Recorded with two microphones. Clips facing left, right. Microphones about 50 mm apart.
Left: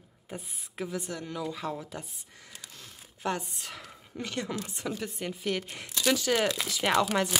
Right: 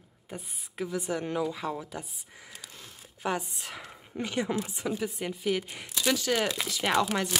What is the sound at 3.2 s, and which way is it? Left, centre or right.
Speech, centre.